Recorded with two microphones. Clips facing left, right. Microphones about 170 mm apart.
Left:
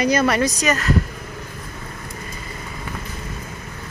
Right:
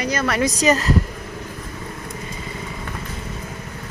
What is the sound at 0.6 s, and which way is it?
Speech, 30° right (ahead or behind).